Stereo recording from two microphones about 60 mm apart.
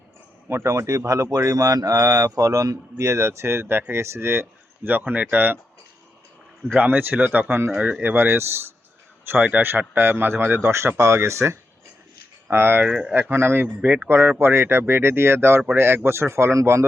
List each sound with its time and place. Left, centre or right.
0.4 s a man's voice: right
0.7 s speech: right
4.9 s speech: right
6.7 s speech: right
7.7 s speech: right
8.0 s a man's voice: right
12.8 s speech: centre
13.3 s speech: right